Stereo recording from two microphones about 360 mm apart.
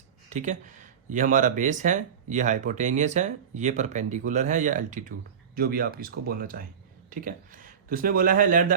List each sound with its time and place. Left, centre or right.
0.3 s speech: centre